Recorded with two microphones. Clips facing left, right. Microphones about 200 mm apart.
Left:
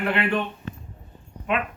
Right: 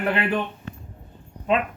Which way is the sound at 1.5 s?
30° right (ahead or behind).